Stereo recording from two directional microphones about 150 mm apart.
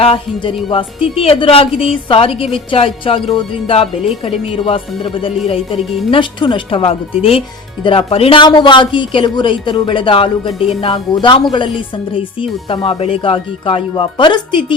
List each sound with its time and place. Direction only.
0.0 s speech: 40° left (ahead or behind)